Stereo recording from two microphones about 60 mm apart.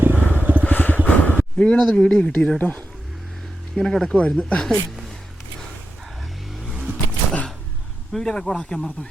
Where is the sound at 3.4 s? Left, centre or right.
Centre.